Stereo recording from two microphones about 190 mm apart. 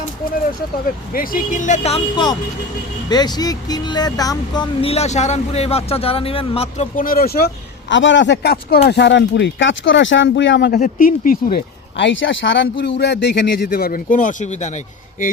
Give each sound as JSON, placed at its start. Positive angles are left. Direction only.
{"t": 1.1, "sound": "speech", "side_deg": 50}
{"t": 3.1, "sound": "speech", "side_deg": 20}
{"t": 6.9, "sound": "speech", "side_deg": 50}
{"t": 10.8, "sound": "speech", "side_deg": 45}
{"t": 11.9, "sound": "speech", "side_deg": 75}